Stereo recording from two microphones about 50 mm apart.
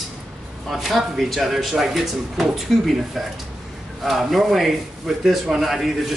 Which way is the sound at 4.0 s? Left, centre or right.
Centre.